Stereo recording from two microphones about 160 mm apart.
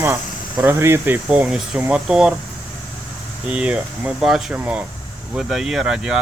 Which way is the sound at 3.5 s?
5° right (ahead or behind).